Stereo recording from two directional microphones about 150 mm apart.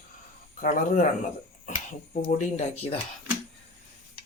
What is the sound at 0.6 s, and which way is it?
Speech, 60° left (ahead or behind).